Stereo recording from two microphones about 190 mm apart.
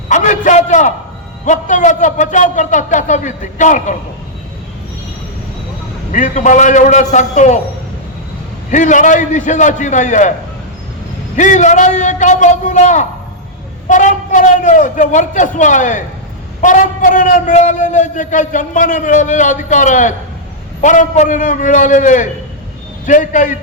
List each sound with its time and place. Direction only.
0.1 s a man's voice: 40° left (ahead or behind)
6.1 s a man's voice: 40° left (ahead or behind)
8.7 s a man's voice: 40° left (ahead or behind)
11.3 s a man's voice: 40° left (ahead or behind)